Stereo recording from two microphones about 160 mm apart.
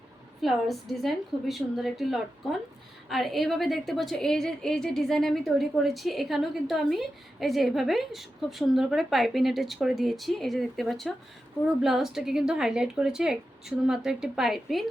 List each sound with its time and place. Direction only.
0.4 s a woman's voice: centre (ahead or behind)